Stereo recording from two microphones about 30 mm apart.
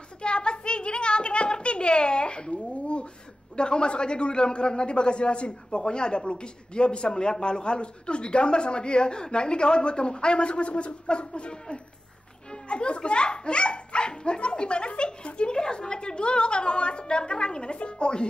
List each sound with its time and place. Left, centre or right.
0.2 s a sound: left
3.5 s a man's voice: left
11.5 s a man's voice: left